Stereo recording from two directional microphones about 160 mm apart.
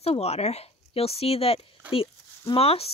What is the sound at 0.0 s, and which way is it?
Speech, 40° left (ahead or behind).